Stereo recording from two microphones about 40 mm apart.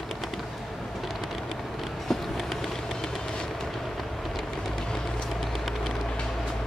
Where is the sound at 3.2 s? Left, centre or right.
Centre.